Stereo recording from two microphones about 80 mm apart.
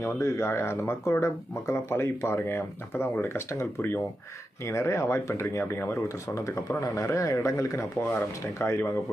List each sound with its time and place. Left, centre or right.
0.0 s speech: left